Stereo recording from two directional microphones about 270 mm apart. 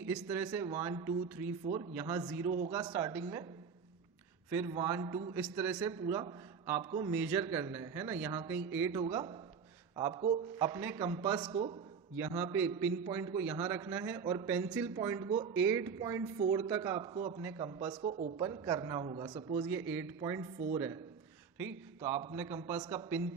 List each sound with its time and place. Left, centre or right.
0.0 s a man's voice: centre
4.5 s a man's voice: centre
12.4 s a man's voice: centre
22.0 s a man's voice: centre